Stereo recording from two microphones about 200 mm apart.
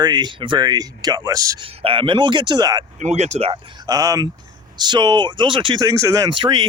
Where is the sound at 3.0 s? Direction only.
35° right (ahead or behind).